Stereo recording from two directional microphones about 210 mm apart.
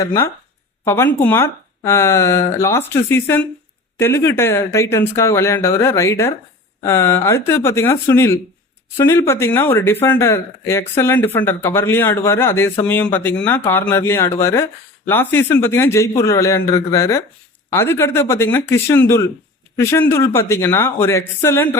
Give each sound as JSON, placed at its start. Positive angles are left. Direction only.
{"t": 0.0, "sound": "speech", "side_deg": 15}